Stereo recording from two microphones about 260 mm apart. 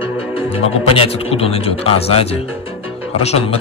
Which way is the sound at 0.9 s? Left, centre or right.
Left.